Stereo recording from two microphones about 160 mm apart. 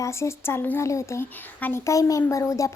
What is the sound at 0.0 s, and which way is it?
Speech, 15° left (ahead or behind).